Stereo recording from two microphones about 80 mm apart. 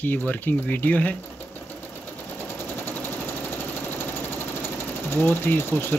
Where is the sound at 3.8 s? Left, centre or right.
Left.